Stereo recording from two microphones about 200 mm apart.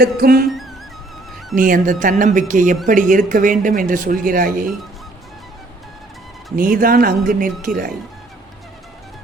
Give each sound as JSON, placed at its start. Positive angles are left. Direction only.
{"t": 0.0, "sound": "speech", "side_deg": -50}
{"t": 1.5, "sound": "speech", "side_deg": -45}
{"t": 6.6, "sound": "speech", "side_deg": -45}